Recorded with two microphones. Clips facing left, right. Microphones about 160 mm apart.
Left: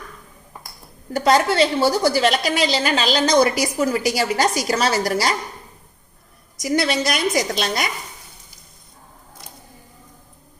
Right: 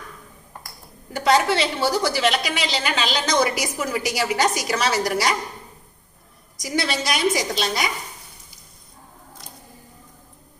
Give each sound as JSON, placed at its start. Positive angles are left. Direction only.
{"t": 1.1, "sound": "a woman's voice", "side_deg": 40}
{"t": 6.6, "sound": "a woman's voice", "side_deg": 55}